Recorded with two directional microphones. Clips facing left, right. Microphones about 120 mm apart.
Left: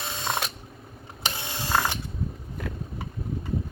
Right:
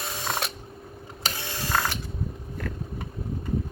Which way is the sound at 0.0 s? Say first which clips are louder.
Left 1 dB; centre (ahead or behind).